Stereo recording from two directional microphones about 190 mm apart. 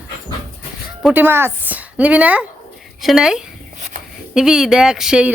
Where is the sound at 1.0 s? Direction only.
5° right (ahead or behind).